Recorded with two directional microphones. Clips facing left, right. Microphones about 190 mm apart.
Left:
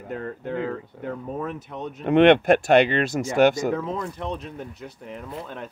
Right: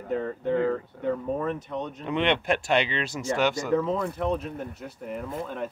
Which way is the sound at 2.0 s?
55° left (ahead or behind).